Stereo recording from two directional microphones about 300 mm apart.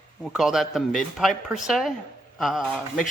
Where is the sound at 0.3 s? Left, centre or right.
Centre.